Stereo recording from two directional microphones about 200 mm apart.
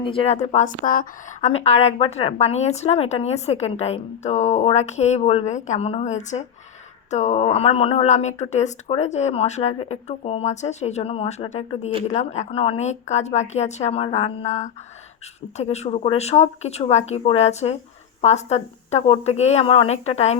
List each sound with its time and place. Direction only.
0.0 s a woman's voice: 25° left (ahead or behind)